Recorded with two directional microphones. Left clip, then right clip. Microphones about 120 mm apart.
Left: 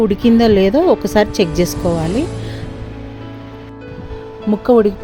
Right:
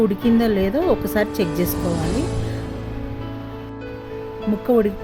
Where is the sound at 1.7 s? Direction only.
Centre (ahead or behind).